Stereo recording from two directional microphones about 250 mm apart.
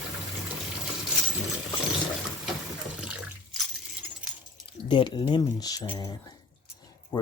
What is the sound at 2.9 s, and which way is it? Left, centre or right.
Water, centre.